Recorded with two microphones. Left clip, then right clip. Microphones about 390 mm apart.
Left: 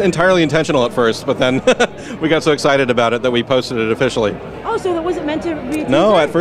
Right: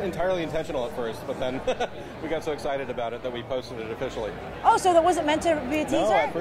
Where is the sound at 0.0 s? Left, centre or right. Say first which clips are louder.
Left 14 dB; left.